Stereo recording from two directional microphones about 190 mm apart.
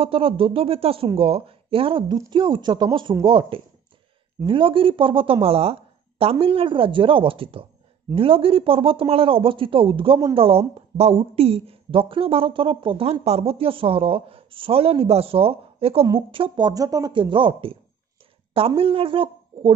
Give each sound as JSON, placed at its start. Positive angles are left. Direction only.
{"t": 0.0, "sound": "speech", "side_deg": -30}
{"t": 18.8, "sound": "speech", "side_deg": -30}